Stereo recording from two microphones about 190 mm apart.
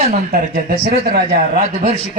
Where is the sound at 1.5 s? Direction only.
40° right (ahead or behind).